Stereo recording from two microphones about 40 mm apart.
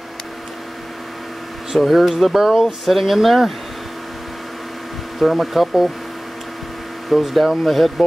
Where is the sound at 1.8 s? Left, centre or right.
Centre.